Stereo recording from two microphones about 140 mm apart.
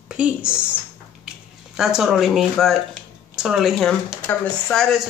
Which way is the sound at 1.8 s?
5° right (ahead or behind).